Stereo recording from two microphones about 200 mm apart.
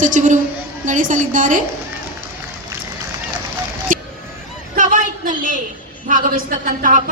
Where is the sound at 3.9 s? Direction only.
40° right (ahead or behind).